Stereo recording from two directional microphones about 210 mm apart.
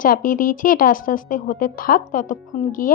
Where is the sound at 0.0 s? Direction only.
40° left (ahead or behind).